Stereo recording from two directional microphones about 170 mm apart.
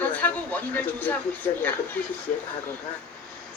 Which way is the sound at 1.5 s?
15° left (ahead or behind).